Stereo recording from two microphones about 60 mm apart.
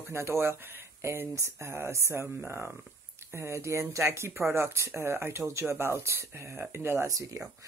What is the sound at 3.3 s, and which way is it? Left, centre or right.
Speech, right.